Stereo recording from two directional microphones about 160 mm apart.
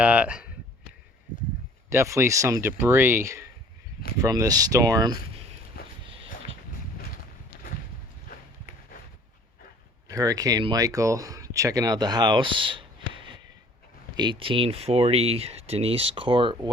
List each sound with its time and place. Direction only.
0.0 s speech: 10° right (ahead or behind)
1.9 s speech: 15° right (ahead or behind)
5.7 s walk: 70° left (ahead or behind)
8.3 s horse: 65° left (ahead or behind)
10.1 s speech: 20° right (ahead or behind)